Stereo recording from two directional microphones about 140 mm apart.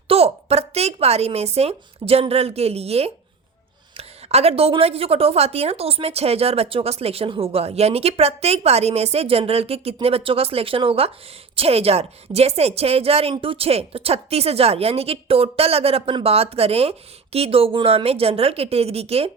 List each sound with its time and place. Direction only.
0.1 s a woman's voice: 45° right (ahead or behind)